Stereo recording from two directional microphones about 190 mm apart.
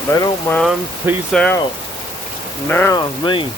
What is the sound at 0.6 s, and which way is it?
Speech, centre (ahead or behind).